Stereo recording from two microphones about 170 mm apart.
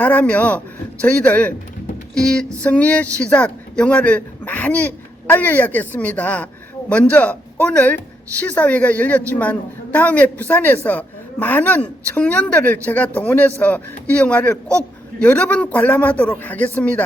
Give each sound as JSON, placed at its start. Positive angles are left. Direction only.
{"t": 0.0, "sound": "speech", "side_deg": 10}